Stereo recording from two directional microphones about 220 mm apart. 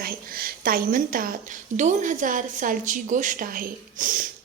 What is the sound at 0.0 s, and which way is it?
A woman's voice, 40° right (ahead or behind).